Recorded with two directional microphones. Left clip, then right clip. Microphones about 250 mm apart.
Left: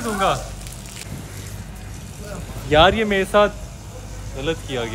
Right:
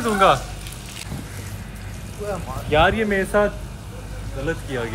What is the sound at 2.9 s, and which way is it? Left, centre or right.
Speech, centre.